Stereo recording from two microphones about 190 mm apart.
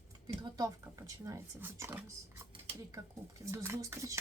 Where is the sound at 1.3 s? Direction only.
15° right (ahead or behind).